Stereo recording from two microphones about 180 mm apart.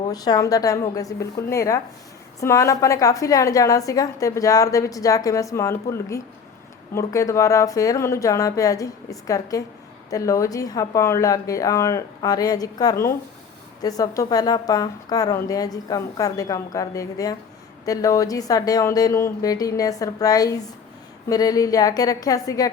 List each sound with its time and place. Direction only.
0.0 s a woman's voice: 20° left (ahead or behind)